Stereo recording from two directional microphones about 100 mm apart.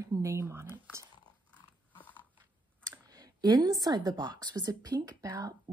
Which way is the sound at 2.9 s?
45° right (ahead or behind).